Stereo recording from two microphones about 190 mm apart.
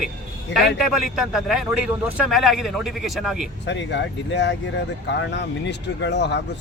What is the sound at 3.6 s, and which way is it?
Speech, 65° left (ahead or behind).